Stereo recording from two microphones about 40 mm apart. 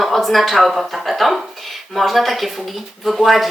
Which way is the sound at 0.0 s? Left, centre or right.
Centre.